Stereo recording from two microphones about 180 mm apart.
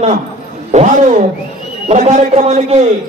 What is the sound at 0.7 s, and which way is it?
A man's voice, 40° right (ahead or behind).